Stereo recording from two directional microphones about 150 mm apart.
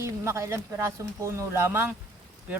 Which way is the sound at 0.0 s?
20° right (ahead or behind).